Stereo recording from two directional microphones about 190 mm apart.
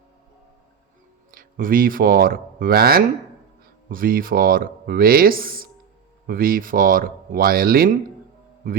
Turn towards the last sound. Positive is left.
turn(degrees=-50)  # may be behind; listen again after turning